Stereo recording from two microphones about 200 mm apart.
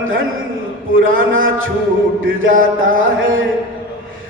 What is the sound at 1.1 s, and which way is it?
Mantra, 80° right.